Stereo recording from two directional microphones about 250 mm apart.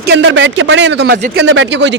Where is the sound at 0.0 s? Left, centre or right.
Right.